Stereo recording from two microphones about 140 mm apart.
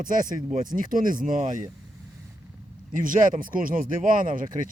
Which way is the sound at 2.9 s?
75° right (ahead or behind).